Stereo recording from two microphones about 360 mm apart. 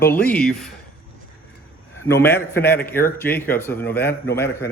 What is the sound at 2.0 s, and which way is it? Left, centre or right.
A man's voice, centre.